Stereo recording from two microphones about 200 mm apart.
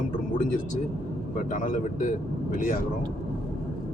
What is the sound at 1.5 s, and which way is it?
Speech, 40° left (ahead or behind).